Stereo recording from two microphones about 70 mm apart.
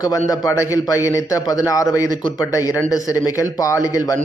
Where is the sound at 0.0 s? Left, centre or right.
Left.